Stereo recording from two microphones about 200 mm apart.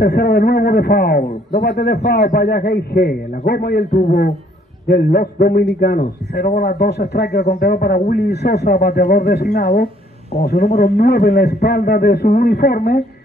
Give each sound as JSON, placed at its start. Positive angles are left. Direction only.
{"t": 0.0, "sound": "a man's voice", "side_deg": 55}